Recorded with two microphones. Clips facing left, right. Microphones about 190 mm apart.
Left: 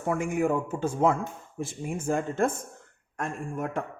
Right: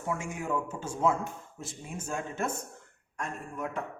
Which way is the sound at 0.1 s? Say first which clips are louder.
Left 7 dB; 55° left (ahead or behind).